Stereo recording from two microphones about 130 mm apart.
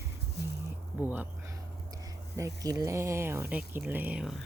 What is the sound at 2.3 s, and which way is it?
Speech, 25° right (ahead or behind).